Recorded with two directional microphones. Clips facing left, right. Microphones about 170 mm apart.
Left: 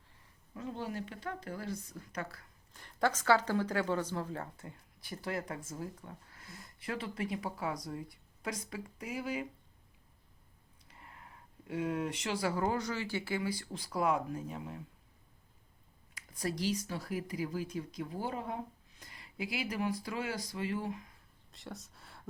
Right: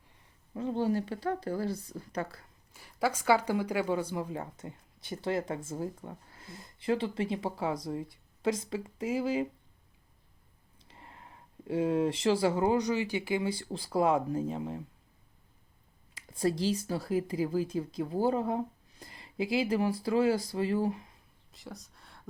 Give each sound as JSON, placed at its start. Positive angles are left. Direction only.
{"t": 0.5, "sound": "speech", "side_deg": -30}
{"t": 2.7, "sound": "speech", "side_deg": -5}
{"t": 10.8, "sound": "speech", "side_deg": -25}
{"t": 16.1, "sound": "speech", "side_deg": -25}
{"t": 21.5, "sound": "speech", "side_deg": 0}